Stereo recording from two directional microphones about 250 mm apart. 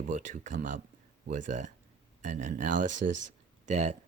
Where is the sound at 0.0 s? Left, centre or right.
Right.